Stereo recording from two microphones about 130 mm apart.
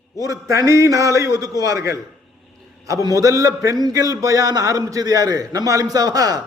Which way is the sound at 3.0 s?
25° right (ahead or behind).